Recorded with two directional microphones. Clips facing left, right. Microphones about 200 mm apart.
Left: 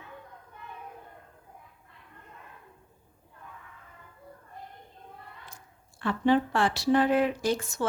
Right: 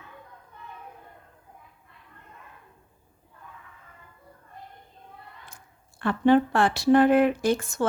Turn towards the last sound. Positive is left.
turn(degrees=-55)  # may be behind; listen again after turning